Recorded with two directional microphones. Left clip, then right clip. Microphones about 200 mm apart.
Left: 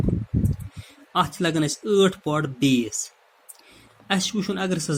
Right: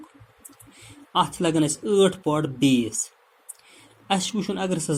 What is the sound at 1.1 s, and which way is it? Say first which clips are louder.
Speech: right 1 dB; 15° left (ahead or behind).